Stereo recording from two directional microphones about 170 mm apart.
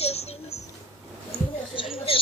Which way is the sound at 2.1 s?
35° left (ahead or behind).